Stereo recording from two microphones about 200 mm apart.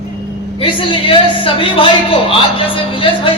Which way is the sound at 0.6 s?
25° left (ahead or behind).